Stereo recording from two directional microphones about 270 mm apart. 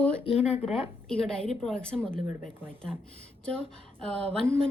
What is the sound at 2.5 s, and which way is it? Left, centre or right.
Speech, centre.